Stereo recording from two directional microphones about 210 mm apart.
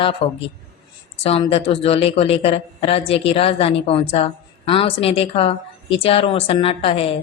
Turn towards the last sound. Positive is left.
turn(degrees=25)  # may be behind; listen again after turning